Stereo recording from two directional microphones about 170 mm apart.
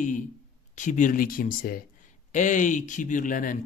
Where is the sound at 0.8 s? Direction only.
45° left (ahead or behind).